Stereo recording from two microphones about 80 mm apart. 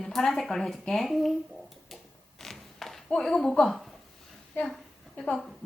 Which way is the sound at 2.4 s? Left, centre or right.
Centre.